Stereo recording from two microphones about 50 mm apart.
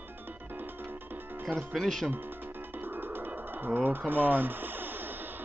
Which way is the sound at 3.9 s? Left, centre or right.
Right.